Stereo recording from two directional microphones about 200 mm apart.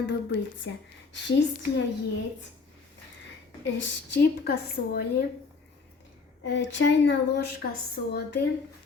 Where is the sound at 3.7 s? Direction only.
60° left (ahead or behind).